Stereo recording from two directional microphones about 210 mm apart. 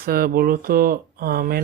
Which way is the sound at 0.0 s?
45° right (ahead or behind).